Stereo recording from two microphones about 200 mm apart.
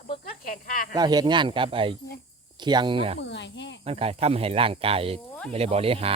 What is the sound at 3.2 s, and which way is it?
Speech, 60° left (ahead or behind).